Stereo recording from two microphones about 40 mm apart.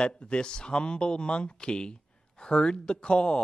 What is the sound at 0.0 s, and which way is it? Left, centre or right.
Speech, left.